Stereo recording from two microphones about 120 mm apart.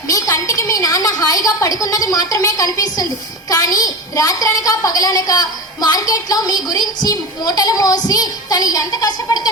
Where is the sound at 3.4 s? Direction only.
30° left (ahead or behind).